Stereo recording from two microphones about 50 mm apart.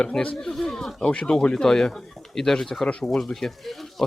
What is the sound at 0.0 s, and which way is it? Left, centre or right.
Speech, centre.